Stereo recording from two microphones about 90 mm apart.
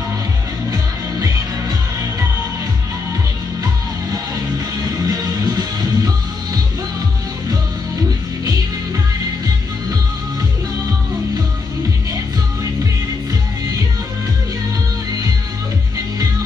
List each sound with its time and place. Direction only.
5.0 s music: 45° right (ahead or behind)